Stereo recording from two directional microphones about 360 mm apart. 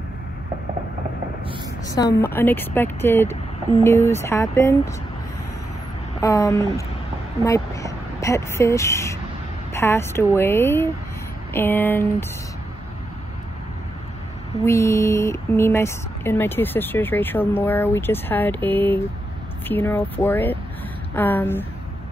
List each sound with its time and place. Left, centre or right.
1.9 s a woman's voice: centre
6.2 s a woman's voice: centre
14.6 s speech: centre